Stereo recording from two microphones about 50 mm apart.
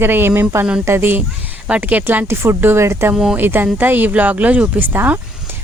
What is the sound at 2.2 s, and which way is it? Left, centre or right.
Speech, right.